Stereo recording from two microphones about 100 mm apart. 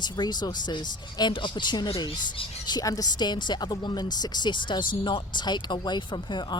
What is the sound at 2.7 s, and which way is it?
Speech, 35° left (ahead or behind).